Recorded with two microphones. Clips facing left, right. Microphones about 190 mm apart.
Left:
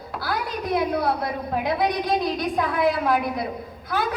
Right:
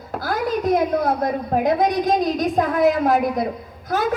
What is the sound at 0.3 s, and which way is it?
A woman's voice, 45° right (ahead or behind).